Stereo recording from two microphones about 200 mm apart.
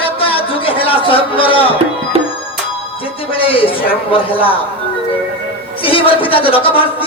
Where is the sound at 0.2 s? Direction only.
25° left (ahead or behind).